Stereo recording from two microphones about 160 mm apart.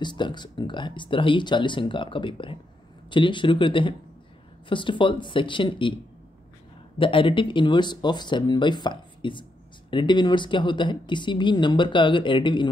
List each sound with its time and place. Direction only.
0.0 s speech: 30° left (ahead or behind)
7.0 s speech: 30° left (ahead or behind)